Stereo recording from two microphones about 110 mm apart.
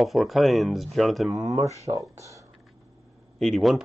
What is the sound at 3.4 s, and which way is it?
Speech, centre (ahead or behind).